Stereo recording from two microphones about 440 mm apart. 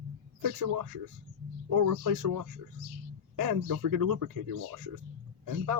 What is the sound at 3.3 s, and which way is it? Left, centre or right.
Speech, right.